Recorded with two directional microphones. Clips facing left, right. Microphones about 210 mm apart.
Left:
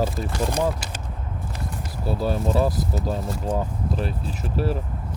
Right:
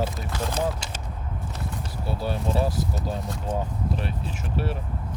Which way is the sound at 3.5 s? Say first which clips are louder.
Left 1 dB; 35° left (ahead or behind).